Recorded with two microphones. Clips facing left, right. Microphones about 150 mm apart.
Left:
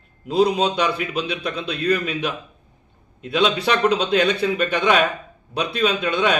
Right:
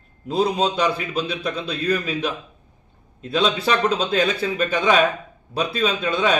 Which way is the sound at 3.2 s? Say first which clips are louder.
Left 1 dB; centre (ahead or behind).